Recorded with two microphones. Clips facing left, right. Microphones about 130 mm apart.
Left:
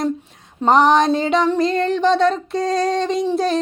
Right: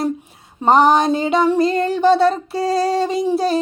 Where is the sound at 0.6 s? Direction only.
5° right (ahead or behind).